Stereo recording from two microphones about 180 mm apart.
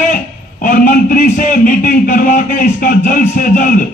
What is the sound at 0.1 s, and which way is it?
A man's voice, 50° left (ahead or behind).